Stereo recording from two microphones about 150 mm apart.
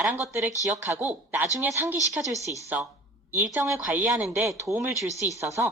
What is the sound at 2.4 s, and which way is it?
Speech, 20° left (ahead or behind).